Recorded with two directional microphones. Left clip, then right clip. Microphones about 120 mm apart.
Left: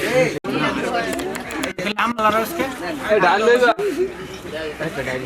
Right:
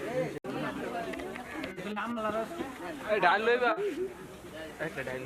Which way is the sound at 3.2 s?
35° right (ahead or behind).